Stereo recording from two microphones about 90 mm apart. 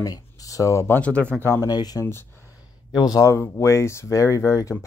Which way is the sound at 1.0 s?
15° left (ahead or behind).